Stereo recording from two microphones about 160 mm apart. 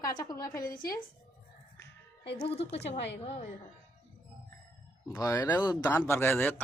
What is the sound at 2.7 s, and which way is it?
Speech, 40° left (ahead or behind).